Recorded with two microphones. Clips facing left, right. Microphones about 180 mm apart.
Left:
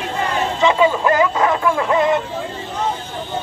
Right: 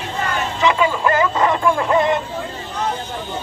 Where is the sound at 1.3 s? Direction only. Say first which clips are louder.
Even; 5° left (ahead or behind).